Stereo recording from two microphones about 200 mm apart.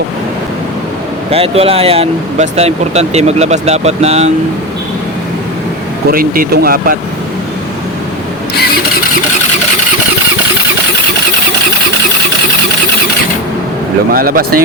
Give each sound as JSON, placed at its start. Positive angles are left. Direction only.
{"t": 1.3, "sound": "speech", "side_deg": -30}
{"t": 6.1, "sound": "speech", "side_deg": -45}
{"t": 14.1, "sound": "speech", "side_deg": -45}